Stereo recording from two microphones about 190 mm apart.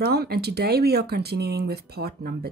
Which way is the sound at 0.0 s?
55° right (ahead or behind).